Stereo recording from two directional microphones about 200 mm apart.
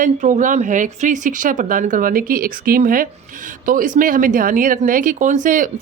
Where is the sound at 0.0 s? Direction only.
40° right (ahead or behind).